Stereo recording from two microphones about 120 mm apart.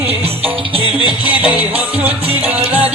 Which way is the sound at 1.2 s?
15° right (ahead or behind).